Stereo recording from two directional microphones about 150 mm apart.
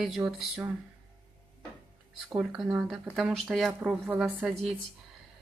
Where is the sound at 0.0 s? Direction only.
Centre (ahead or behind).